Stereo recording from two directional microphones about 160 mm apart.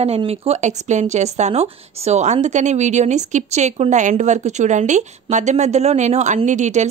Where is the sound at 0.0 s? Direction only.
40° right (ahead or behind).